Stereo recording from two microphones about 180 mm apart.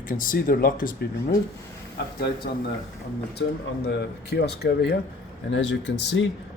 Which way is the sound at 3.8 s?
65° left (ahead or behind).